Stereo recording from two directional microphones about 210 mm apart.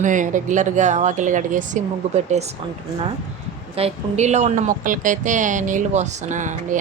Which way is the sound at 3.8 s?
30° right (ahead or behind).